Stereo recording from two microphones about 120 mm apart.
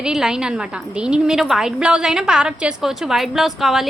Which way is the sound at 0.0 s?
5° right (ahead or behind).